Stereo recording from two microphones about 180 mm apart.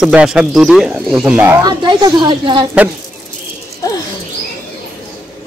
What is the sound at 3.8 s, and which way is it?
Bird, 20° left (ahead or behind).